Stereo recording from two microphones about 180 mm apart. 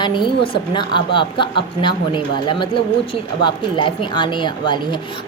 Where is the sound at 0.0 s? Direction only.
25° left (ahead or behind).